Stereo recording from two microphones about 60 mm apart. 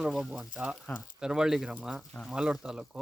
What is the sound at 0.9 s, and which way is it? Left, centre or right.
Speech, left.